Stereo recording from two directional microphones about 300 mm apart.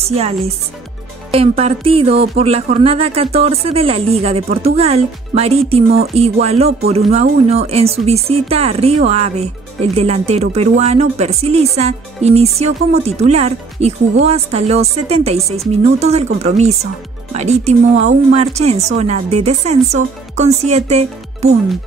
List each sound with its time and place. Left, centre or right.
0.0 s speech: centre
1.3 s speech: centre